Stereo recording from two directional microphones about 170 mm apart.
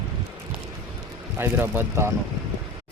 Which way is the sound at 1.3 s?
15° right (ahead or behind).